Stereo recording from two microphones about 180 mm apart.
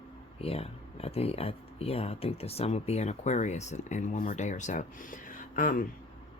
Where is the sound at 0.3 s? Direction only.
35° left (ahead or behind).